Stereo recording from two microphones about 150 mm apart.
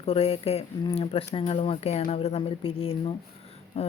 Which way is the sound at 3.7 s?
40° left (ahead or behind).